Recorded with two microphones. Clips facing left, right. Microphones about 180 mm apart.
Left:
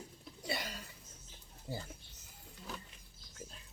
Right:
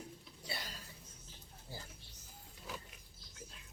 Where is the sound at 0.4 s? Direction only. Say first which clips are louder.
Left 7 dB; 75° left (ahead or behind).